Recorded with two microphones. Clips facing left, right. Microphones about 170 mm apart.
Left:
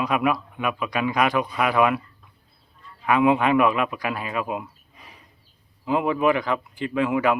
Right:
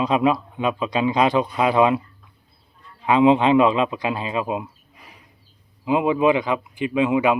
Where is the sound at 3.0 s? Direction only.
20° right (ahead or behind).